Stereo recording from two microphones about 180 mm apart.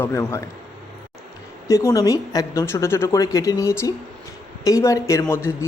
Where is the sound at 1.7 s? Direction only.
15° left (ahead or behind).